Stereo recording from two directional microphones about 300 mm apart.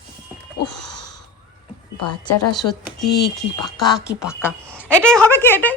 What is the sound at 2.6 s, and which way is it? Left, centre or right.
Speech, centre.